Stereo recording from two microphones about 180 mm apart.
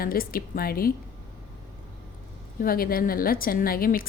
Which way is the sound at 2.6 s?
55° left (ahead or behind).